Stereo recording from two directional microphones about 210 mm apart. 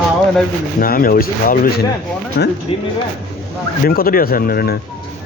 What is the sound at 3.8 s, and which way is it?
Speech, 45° left (ahead or behind).